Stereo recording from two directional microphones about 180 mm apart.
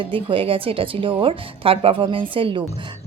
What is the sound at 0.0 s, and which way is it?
A woman's voice, 30° right (ahead or behind).